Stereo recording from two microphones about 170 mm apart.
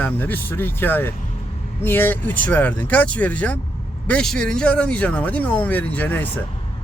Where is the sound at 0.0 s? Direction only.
10° left (ahead or behind).